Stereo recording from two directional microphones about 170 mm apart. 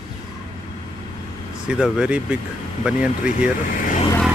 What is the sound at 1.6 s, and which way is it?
Speech, 5° right (ahead or behind).